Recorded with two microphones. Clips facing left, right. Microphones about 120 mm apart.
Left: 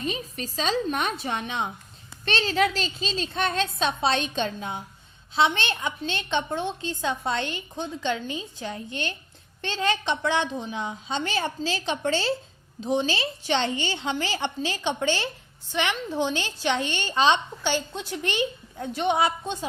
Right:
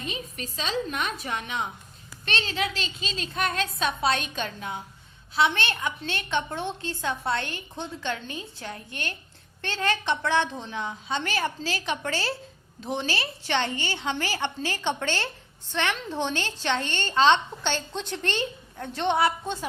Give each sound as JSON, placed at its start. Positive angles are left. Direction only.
{"t": 0.0, "sound": "a woman's voice", "side_deg": 35}
{"t": 2.2, "sound": "a woman's voice", "side_deg": 35}